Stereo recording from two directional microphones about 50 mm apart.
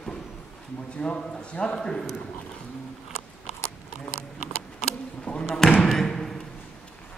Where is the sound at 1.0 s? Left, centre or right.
Left.